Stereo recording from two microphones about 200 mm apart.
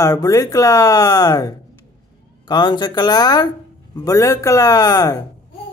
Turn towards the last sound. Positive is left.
turn(degrees=20)  # may be behind; listen again after turning